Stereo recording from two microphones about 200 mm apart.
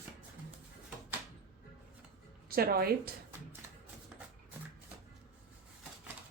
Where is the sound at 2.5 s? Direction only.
50° right (ahead or behind).